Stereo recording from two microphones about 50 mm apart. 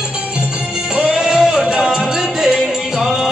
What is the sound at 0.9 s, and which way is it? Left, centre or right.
Music, centre.